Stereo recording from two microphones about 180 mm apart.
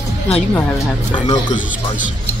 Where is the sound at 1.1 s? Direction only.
25° left (ahead or behind).